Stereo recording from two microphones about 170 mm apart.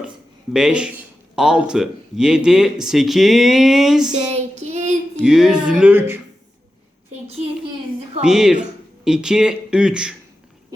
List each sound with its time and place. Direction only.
0.5 s speech: 5° right (ahead or behind)
4.6 s child singing: 45° right (ahead or behind)
5.1 s speech: 5° right (ahead or behind)
8.2 s speech: 5° right (ahead or behind)